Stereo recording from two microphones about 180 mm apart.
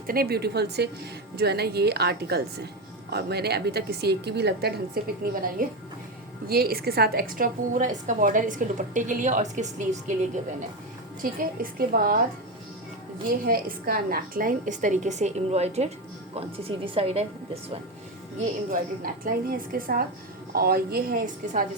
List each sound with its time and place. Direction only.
0.1 s a woman's voice: 60° right (ahead or behind)
13.4 s a woman's voice: 55° right (ahead or behind); by 17.6 s 35° right (ahead or behind)
18.7 s a woman's voice: 50° right (ahead or behind)